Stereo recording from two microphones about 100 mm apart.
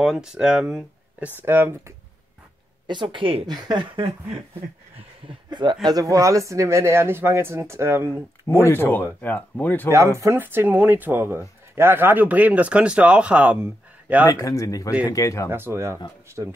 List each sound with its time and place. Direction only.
0.0 s speech: 5° right (ahead or behind)
1.4 s speech: 20° right (ahead or behind)
2.9 s speech: 55° right (ahead or behind)
3.4 s speech: 45° right (ahead or behind)
5.5 s a man's voice: 50° right (ahead or behind)
5.9 s speech: 35° right (ahead or behind)
8.6 s speech: 20° left (ahead or behind)
9.8 s speech: 30° right (ahead or behind); by 14.3 s 15° right (ahead or behind)
14.3 s speech: 35° left (ahead or behind)
15.5 s speech: 25° right (ahead or behind)